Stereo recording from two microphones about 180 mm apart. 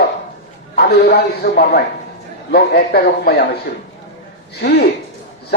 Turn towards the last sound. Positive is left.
turn(degrees=60)  # may be behind; listen again after turning